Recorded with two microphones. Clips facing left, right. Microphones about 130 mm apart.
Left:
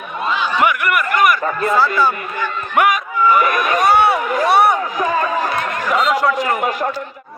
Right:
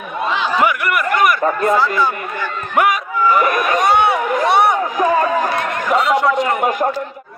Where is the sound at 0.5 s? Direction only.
30° right (ahead or behind).